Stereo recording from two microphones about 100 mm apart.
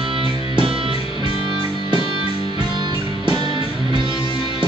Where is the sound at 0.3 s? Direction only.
60° left (ahead or behind).